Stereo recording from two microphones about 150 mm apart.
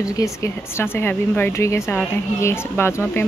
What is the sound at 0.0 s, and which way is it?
Speech, 20° left (ahead or behind).